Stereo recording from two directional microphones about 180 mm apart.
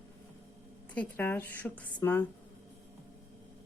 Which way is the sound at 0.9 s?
10° left (ahead or behind).